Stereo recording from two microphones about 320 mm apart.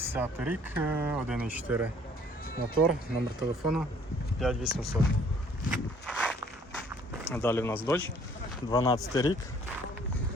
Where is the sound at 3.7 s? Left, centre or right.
Right.